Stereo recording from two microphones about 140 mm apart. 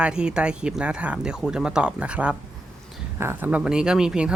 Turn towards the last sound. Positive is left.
turn(degrees=-5)  # may be behind; listen again after turning